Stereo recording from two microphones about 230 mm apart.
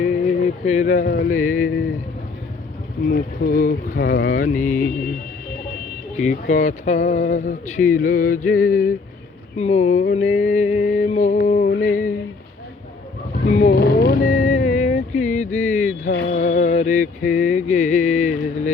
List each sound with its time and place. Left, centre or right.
0.0 s music: left
3.1 s speech: left
6.2 s speech: left
13.4 s speech: left
13.7 s vehicle: left
16.3 s music: left